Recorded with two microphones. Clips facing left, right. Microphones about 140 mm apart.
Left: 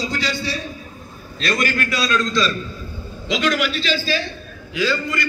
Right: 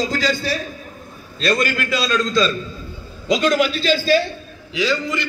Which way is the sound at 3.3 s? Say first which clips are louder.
Right 4 dB; 35° right (ahead or behind).